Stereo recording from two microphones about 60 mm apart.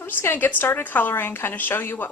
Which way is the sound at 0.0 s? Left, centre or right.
Left.